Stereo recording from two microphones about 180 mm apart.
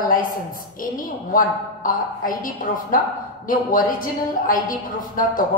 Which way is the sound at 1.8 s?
50° left (ahead or behind).